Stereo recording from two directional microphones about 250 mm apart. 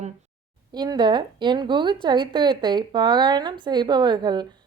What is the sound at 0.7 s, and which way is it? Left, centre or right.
A woman's voice, centre.